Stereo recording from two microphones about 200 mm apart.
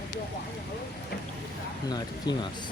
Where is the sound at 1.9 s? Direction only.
20° left (ahead or behind).